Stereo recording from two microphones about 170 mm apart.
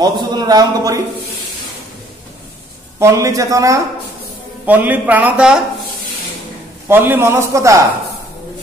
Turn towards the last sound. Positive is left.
turn(degrees=-15)  # may be behind; listen again after turning